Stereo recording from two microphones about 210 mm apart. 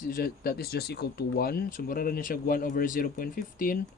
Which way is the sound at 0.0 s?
45° left (ahead or behind).